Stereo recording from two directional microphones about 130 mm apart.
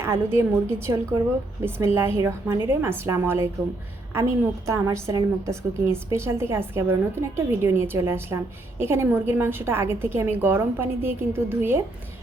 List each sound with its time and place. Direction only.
0.0 s a woman's voice: 20° right (ahead or behind)
2.0 s a woman's voice: 20° right (ahead or behind)